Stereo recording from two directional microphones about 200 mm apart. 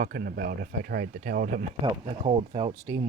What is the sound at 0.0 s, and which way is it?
Speech, 50° right (ahead or behind).